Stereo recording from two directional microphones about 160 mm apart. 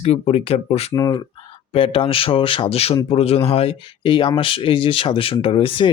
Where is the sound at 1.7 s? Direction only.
35° left (ahead or behind).